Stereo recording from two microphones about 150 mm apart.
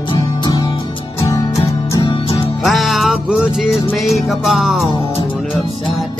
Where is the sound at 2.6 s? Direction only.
Centre (ahead or behind).